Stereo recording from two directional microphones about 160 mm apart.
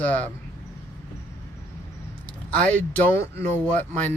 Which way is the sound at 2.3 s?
10° left (ahead or behind).